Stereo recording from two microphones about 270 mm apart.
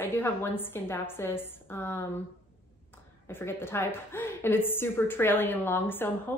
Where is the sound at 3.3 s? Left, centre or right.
Centre.